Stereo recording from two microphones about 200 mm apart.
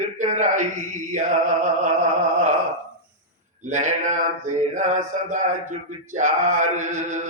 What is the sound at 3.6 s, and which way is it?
Speech, 40° right (ahead or behind).